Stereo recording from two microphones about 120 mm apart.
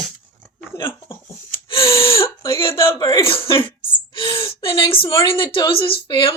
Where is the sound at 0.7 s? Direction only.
20° left (ahead or behind).